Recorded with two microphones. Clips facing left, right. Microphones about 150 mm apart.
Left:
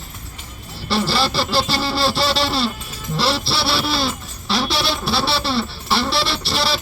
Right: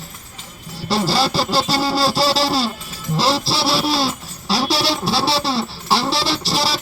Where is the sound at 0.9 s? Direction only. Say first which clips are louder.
Right 2 dB; 40° right (ahead or behind).